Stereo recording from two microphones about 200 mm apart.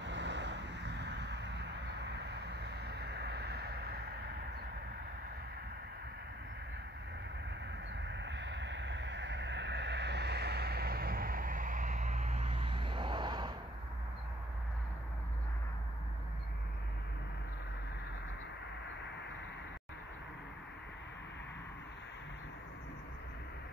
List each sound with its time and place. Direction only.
0.0 s vehicle: 60° right (ahead or behind)
8.0 s vehicle: 60° right (ahead or behind); by 13.6 s 20° right (ahead or behind)